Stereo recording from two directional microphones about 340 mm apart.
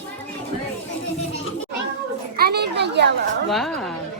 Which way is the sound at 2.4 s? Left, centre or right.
Right.